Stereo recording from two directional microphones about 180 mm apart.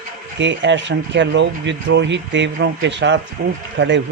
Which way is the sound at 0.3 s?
85° right.